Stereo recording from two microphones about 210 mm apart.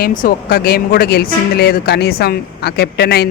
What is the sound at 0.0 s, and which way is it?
Speech, 40° left (ahead or behind).